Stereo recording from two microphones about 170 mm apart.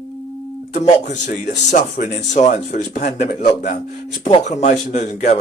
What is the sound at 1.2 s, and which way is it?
Speech, 45° left (ahead or behind).